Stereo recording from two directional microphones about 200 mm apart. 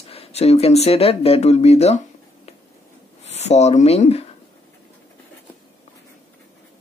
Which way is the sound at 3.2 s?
35° left (ahead or behind).